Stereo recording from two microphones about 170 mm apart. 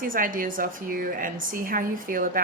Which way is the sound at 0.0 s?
55° right (ahead or behind).